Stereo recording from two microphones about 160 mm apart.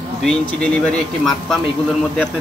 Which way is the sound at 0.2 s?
5° left (ahead or behind).